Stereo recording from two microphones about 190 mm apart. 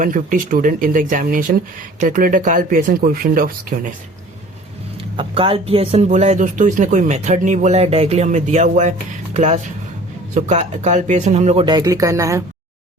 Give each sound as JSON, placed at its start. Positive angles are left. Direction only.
{"t": 0.0, "sound": "speech", "side_deg": -45}
{"t": 5.1, "sound": "speech", "side_deg": -30}
{"t": 11.6, "sound": "speech", "side_deg": -20}